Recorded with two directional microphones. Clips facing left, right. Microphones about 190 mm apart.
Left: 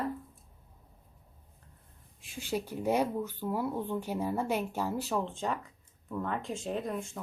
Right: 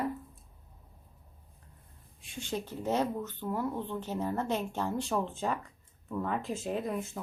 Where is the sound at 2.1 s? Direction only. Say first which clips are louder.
Left 2 dB; centre (ahead or behind).